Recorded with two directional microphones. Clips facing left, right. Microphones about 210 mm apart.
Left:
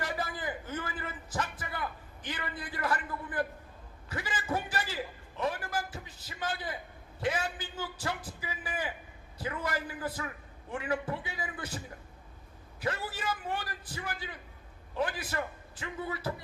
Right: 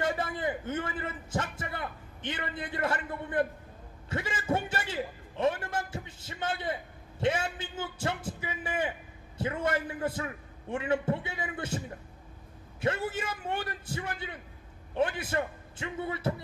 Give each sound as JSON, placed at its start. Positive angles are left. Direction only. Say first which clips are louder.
{"t": 0.0, "sound": "a man's voice", "louder": "right 5 dB", "side_deg": -25}
{"t": 12.8, "sound": "a man's voice", "louder": "right 4 dB", "side_deg": -25}